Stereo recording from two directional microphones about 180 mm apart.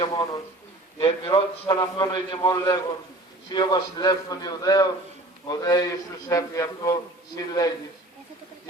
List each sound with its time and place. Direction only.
0.0 s a man's voice: 25° left (ahead or behind)